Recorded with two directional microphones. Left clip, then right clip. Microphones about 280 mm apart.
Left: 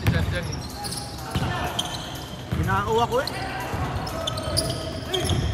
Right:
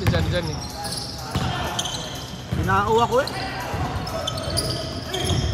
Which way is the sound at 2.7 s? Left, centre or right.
Right.